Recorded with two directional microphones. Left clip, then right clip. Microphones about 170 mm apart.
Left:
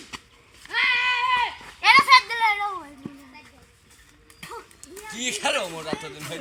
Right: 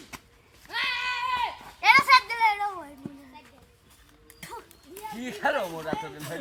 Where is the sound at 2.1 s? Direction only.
30° right (ahead or behind).